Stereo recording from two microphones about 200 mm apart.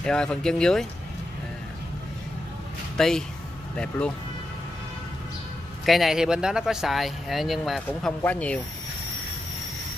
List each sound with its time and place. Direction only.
0.0 s speech: 5° left (ahead or behind)
3.0 s speech: 5° left (ahead or behind)
5.9 s speech: centre (ahead or behind)